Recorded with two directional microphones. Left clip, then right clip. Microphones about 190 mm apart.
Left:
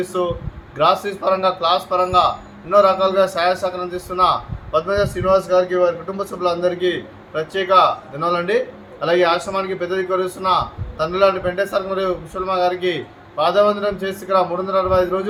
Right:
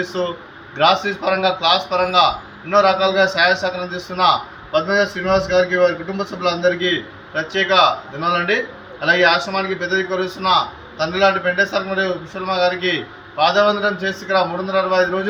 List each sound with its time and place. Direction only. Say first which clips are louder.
0.0 s a man's voice: left 1 dB; 30° left (ahead or behind)